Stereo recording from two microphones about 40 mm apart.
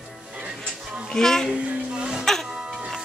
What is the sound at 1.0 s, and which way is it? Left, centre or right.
Speech, centre.